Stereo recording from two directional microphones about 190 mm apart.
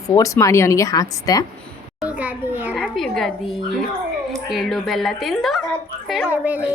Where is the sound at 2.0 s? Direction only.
5° right (ahead or behind).